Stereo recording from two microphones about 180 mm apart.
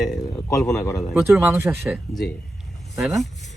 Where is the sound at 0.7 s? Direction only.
15° left (ahead or behind).